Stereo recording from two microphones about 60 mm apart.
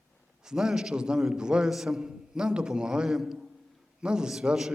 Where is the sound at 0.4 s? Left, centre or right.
Centre.